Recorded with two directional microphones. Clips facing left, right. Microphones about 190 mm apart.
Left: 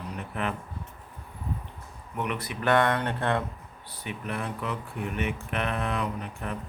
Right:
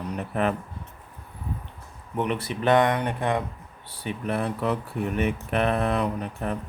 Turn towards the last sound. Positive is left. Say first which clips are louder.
# right 5 dB
turn(degrees=-35)  # may be behind; listen again after turning